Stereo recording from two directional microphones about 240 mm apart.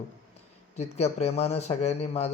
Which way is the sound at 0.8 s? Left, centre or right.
Left.